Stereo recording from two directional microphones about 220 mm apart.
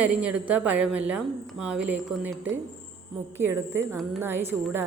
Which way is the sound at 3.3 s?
10° right (ahead or behind).